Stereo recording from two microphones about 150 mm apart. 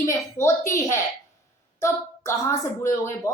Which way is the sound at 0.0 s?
20° left (ahead or behind).